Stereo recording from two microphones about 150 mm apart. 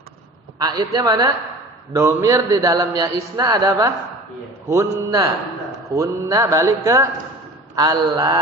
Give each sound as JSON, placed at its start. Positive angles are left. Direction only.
{"t": 0.6, "sound": "a man's voice", "side_deg": -25}